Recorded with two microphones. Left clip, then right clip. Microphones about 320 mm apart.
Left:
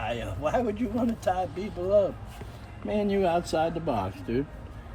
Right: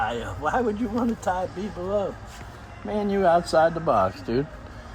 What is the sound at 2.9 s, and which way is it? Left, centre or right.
Speech, centre.